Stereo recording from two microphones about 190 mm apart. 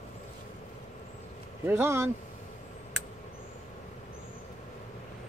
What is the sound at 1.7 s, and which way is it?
Speech, 10° right (ahead or behind).